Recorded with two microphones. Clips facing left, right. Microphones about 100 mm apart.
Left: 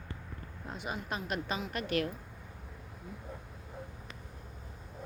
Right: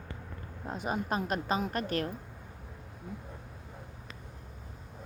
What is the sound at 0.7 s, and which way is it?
A woman's voice, 40° right (ahead or behind).